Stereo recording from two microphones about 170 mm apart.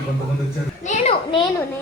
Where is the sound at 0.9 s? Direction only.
35° left (ahead or behind).